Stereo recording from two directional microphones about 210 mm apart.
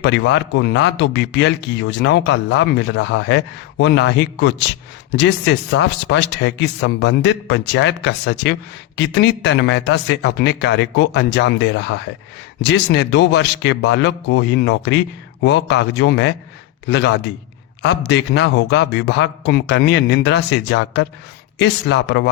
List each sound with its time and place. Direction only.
0.0 s a man's voice: 55° left (ahead or behind)